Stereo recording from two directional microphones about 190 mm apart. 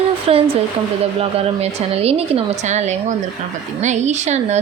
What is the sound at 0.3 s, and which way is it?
A woman's voice, 30° right (ahead or behind).